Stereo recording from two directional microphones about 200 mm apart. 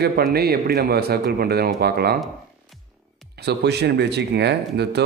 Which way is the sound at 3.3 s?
55° right (ahead or behind).